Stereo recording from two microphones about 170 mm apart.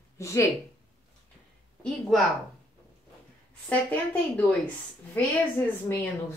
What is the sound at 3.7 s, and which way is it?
A woman's voice, 10° left (ahead or behind).